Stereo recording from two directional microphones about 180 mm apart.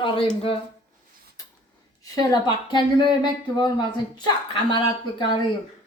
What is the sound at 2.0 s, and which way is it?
Speech, 20° left (ahead or behind).